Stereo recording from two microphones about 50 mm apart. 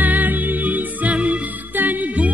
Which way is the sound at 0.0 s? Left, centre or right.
Right.